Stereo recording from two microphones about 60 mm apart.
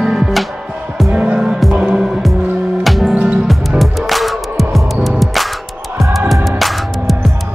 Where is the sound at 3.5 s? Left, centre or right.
Centre.